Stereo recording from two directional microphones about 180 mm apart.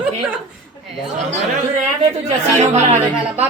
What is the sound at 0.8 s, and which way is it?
Speech, centre (ahead or behind).